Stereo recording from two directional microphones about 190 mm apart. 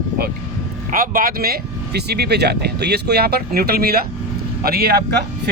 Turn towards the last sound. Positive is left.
turn(degrees=-55)  # may be behind; listen again after turning